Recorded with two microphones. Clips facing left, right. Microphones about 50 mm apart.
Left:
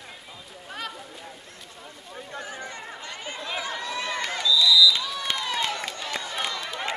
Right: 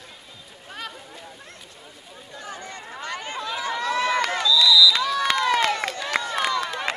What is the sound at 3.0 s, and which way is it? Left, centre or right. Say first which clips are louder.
Chatter: right 6 dB; right.